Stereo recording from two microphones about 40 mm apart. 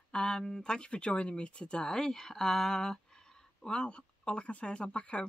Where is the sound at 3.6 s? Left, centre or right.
Left.